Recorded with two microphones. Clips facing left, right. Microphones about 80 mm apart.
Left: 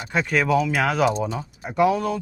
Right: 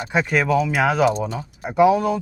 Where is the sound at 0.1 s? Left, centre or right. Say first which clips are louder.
Right 1 dB; centre.